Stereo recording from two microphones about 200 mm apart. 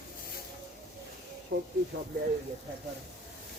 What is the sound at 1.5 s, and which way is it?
Speech, 65° right (ahead or behind).